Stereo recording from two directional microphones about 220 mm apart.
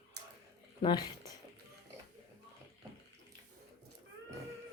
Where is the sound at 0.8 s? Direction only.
20° left (ahead or behind).